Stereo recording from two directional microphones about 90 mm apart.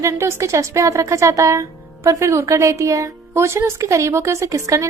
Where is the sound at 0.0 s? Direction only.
35° right (ahead or behind).